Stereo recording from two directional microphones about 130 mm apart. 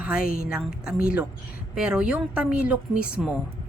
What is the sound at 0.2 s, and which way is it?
Speech, 90° left.